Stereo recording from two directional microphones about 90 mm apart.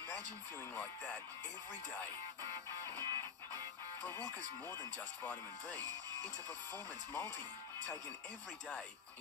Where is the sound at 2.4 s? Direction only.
30° left (ahead or behind).